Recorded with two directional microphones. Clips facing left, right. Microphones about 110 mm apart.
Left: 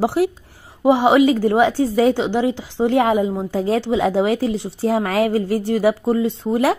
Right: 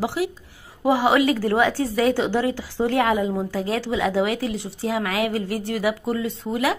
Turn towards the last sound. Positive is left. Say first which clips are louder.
# left 6 dB
turn(degrees=30)  # may be behind; listen again after turning